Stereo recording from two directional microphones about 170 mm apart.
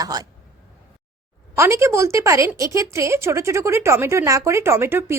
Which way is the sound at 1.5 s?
15° right (ahead or behind).